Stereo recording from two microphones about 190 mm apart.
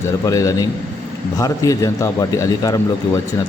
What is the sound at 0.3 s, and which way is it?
A man's voice, 15° left (ahead or behind).